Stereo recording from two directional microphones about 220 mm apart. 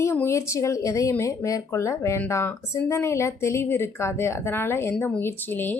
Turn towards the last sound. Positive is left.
turn(degrees=10)  # may be behind; listen again after turning